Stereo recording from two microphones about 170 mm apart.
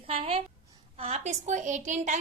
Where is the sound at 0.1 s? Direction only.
35° right (ahead or behind).